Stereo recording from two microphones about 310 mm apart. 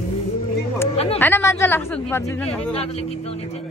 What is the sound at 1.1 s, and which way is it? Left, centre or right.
Speech, centre.